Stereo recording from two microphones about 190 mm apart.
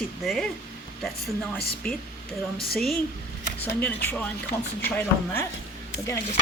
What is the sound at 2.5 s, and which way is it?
A woman's voice, centre (ahead or behind).